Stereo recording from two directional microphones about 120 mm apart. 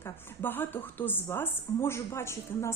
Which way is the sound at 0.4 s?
15° left (ahead or behind).